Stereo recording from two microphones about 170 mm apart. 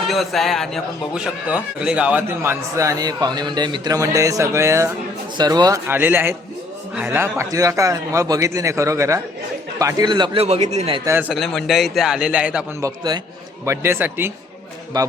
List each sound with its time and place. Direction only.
0.1 s a man's voice: centre (ahead or behind); by 10.4 s 25° right (ahead or behind)
10.4 s a man's voice: 40° right (ahead or behind)
11.0 s a man's voice: 10° right (ahead or behind)
11.3 s a man's voice: centre (ahead or behind)
12.8 s a man's voice: 25° right (ahead or behind)
13.7 s a man's voice: 15° right (ahead or behind)
14.9 s a man's voice: 25° right (ahead or behind)